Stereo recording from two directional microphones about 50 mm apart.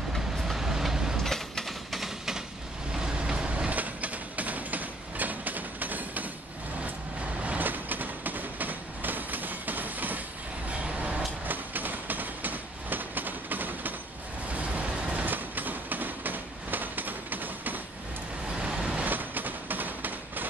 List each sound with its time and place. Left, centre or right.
0.4 s vehicle: centre
1.1 s a sound: centre
2.9 s train: centre; by 6.2 s right
7.4 s train: right
10.7 s vehicle: right
11.4 s train: right
14.5 s vehicle: right
15.2 s train: right
18.6 s vehicle: centre
19.0 s a sound: right